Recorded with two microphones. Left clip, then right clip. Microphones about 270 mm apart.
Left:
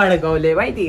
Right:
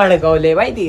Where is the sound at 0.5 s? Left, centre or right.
Right.